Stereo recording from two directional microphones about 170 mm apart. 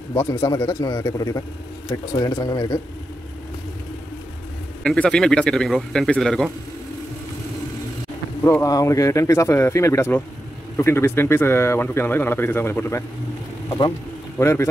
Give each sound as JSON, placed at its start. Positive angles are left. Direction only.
{"t": 0.1, "sound": "a man's voice", "side_deg": 15}
{"t": 4.8, "sound": "speech", "side_deg": 5}
{"t": 8.5, "sound": "speech", "side_deg": 20}
{"t": 13.7, "sound": "speech", "side_deg": 25}